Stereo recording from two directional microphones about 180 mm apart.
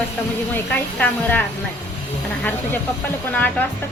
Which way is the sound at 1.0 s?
10° left (ahead or behind).